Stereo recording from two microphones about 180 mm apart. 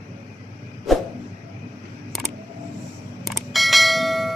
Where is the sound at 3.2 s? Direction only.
Centre (ahead or behind).